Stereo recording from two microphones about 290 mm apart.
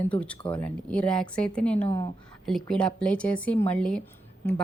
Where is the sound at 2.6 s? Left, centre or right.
Centre.